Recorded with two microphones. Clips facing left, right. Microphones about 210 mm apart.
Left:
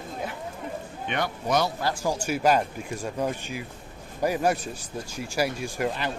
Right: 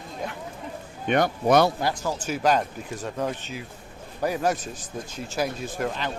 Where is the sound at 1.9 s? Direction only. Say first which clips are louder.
Left 2 dB; 10° left (ahead or behind).